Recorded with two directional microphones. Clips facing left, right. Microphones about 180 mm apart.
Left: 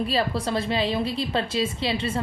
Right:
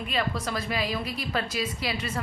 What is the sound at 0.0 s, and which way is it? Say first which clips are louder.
A woman's voice: left 5 dB; 30° left (ahead or behind).